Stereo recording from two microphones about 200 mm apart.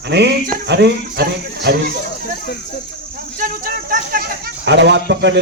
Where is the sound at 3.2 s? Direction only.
45° right (ahead or behind).